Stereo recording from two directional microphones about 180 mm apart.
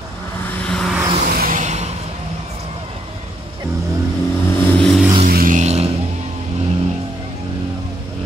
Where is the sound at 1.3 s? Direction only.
50° right (ahead or behind).